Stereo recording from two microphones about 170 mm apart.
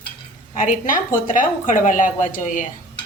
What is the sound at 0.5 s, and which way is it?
A woman's voice, 50° left (ahead or behind).